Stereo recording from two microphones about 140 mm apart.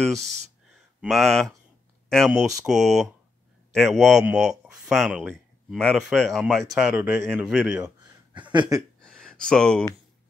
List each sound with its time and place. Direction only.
0.0 s speech: centre (ahead or behind)
8.5 s speech: 20° right (ahead or behind)
9.0 s a sound: 5° left (ahead or behind)
9.5 s speech: 5° left (ahead or behind)